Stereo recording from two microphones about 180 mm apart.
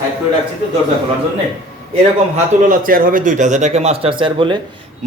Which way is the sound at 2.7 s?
50° right (ahead or behind).